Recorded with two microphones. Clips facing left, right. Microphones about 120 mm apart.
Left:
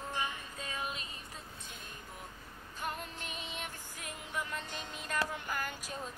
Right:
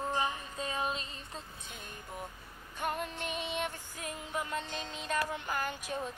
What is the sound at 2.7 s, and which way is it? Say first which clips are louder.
Music: right 5 dB; 50° right (ahead or behind).